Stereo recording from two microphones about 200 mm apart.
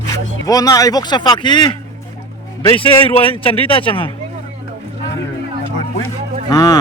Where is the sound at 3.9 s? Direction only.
25° left (ahead or behind).